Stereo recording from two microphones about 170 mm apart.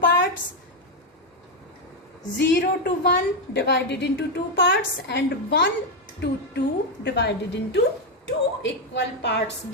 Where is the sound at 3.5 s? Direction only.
90° left.